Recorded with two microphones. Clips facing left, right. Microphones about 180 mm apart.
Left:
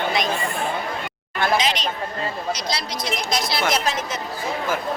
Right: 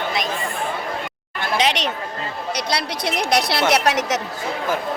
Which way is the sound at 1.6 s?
65° right (ahead or behind).